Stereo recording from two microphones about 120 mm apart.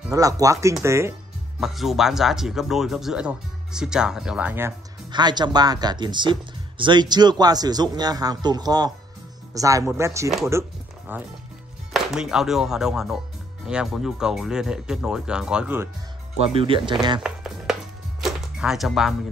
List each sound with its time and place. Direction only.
0.1 s speech: 30° right (ahead or behind)
1.6 s speech: centre (ahead or behind)
5.1 s a man's voice: 35° right (ahead or behind); by 11.2 s 15° right (ahead or behind)
11.9 s speech: 5° right (ahead or behind)
16.3 s speech: 50° right (ahead or behind)
17.2 s music: 5° right (ahead or behind)